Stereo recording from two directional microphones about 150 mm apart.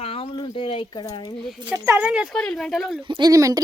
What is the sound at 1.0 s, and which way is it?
Speech, 25° left (ahead or behind).